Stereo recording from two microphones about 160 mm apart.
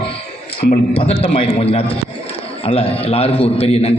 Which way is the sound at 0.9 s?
35° left (ahead or behind).